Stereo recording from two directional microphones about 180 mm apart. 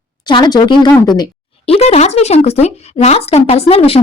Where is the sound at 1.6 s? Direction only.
35° left (ahead or behind).